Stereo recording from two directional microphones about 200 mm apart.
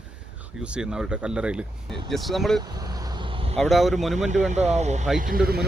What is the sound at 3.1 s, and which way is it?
Vehicle, 25° right (ahead or behind).